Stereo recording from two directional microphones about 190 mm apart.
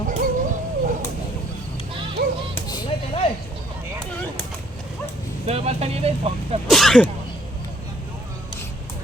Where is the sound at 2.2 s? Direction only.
50° right (ahead or behind).